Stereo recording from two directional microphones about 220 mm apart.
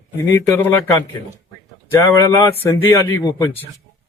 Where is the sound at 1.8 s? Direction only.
15° left (ahead or behind).